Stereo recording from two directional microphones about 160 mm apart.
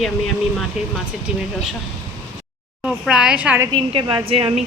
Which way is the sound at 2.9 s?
5° right (ahead or behind).